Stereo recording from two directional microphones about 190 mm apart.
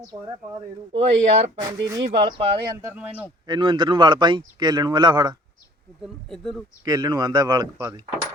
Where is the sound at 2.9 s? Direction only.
5° right (ahead or behind).